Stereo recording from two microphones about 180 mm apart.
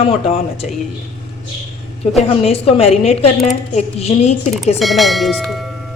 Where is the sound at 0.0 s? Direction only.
35° left (ahead or behind).